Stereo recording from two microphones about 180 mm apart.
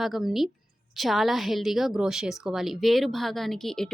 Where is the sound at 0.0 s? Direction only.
Centre (ahead or behind).